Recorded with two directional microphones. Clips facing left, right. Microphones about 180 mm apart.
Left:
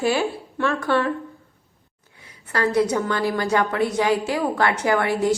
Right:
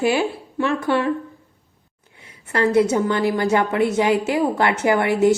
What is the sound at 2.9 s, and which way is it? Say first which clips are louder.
A woman's voice: right 3 dB; 20° right (ahead or behind).